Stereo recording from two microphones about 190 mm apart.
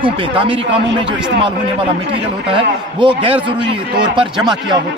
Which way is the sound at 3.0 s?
25° right (ahead or behind).